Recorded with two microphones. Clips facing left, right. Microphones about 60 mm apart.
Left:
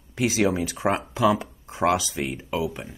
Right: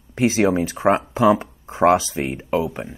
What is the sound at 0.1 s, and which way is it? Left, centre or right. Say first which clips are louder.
Speech: right 5 dB; right.